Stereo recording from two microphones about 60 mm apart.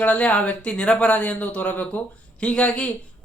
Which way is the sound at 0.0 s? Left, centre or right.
Left.